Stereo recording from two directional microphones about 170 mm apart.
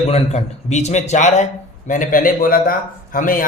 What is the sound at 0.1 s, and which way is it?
A man's voice, 40° left (ahead or behind).